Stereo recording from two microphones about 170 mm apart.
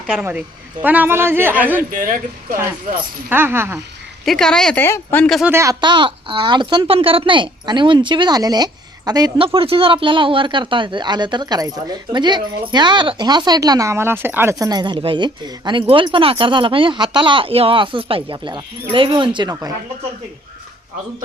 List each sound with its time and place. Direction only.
0.2 s a woman's voice: 10° right (ahead or behind)
3.2 s a woman's voice: 10° right (ahead or behind)
4.3 s speech: 5° left (ahead or behind)
5.5 s a woman's voice: 15° right (ahead or behind)
5.8 s speech: 30° right (ahead or behind)